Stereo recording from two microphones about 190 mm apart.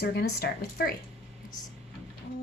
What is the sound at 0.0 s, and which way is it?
Speech, 55° left (ahead or behind).